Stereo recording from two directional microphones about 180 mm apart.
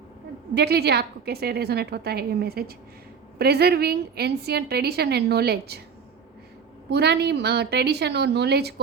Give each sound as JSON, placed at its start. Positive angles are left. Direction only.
{"t": 0.5, "sound": "a woman's voice", "side_deg": -60}
{"t": 6.9, "sound": "a woman's voice", "side_deg": -65}